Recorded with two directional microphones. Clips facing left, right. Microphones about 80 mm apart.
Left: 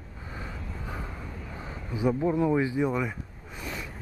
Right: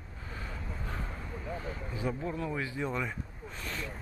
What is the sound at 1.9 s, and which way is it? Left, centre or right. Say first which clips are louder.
Speech: left 10 dB; centre.